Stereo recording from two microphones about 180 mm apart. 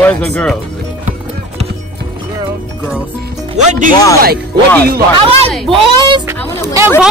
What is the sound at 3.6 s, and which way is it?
Speech, 40° right (ahead or behind).